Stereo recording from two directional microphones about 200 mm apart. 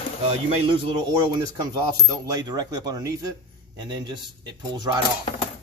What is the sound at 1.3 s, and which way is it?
Speech, 20° right (ahead or behind).